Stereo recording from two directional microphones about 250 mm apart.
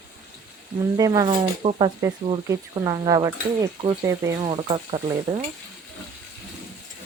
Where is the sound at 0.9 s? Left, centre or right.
Centre.